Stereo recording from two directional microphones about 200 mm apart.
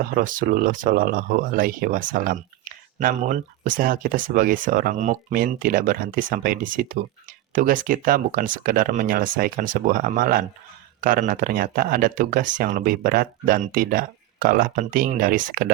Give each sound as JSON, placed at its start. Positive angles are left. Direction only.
{"t": 0.0, "sound": "speech", "side_deg": -45}